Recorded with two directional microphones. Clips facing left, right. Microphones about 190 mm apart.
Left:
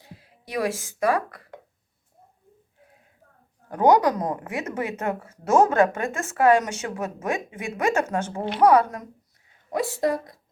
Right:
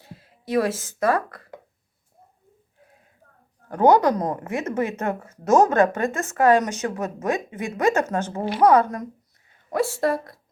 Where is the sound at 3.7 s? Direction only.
15° left (ahead or behind).